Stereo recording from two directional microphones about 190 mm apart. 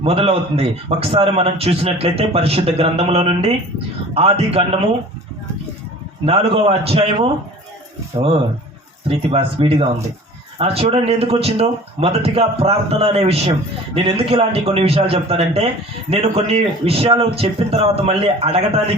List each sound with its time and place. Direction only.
0.0 s a man's voice: 30° right (ahead or behind)
6.2 s a man's voice: 30° right (ahead or behind)
9.0 s a man's voice: 30° right (ahead or behind)